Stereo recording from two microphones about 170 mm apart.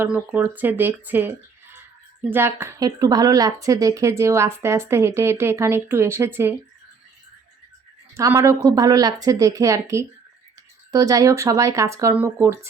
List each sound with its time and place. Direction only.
0.0 s a woman's voice: 10° right (ahead or behind)
8.1 s a woman's voice: 15° right (ahead or behind)